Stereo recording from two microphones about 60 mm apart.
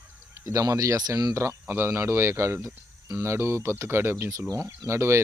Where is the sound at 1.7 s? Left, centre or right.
Right.